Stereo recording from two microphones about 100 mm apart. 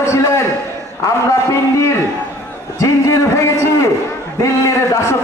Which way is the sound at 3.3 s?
30° left (ahead or behind).